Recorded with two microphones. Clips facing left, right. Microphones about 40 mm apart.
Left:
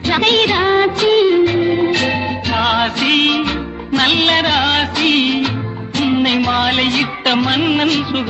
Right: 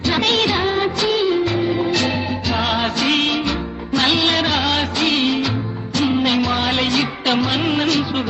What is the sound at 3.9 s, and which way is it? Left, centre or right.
Music of bollywood, left.